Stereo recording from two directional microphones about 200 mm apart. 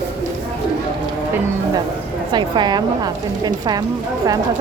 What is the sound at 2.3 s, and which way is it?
A woman's voice, 20° right (ahead or behind).